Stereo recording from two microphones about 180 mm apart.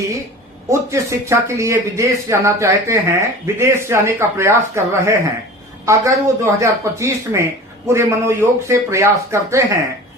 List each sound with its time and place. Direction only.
0.7 s speech: 15° right (ahead or behind)